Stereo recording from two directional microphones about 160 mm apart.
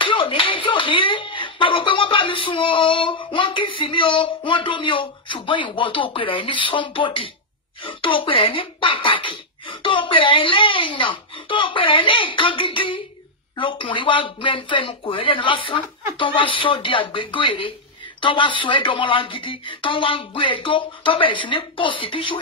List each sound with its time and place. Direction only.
0.0 s speech: 30° left (ahead or behind)